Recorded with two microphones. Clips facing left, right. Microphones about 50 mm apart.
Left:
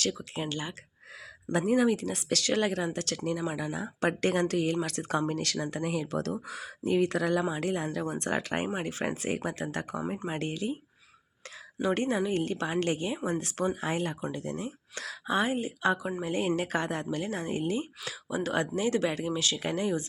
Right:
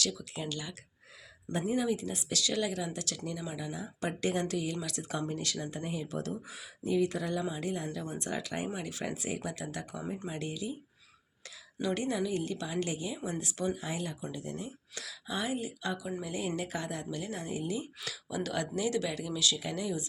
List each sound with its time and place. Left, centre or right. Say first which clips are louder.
0.1 s speech: left 4 dB; left
1.5 s speech: left 6 dB; left
11.8 s speech: left 4 dB; left
18.0 s speech: left 4 dB; left